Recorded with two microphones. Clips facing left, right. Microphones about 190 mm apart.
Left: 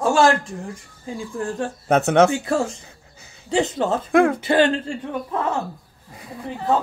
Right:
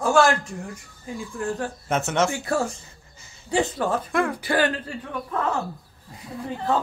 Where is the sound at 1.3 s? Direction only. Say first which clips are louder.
Left 2 dB; 25° left (ahead or behind).